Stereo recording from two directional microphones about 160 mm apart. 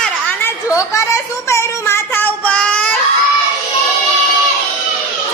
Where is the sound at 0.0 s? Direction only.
10° left (ahead or behind).